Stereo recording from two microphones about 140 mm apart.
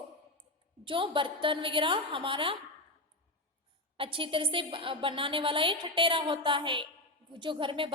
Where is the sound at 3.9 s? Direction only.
40° right (ahead or behind).